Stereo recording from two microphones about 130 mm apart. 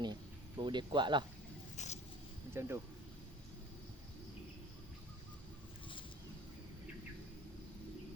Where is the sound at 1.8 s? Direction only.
60° left (ahead or behind).